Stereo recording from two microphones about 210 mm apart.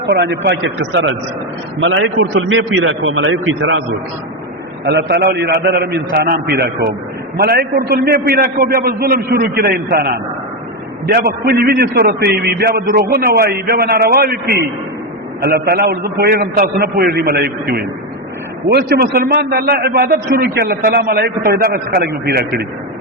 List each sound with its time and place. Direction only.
0.0 s a man's voice: 55° right (ahead or behind)
4.9 s a man's voice: 55° right (ahead or behind)